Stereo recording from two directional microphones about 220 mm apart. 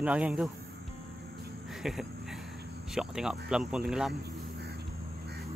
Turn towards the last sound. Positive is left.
turn(degrees=0)  # may be behind; listen again after turning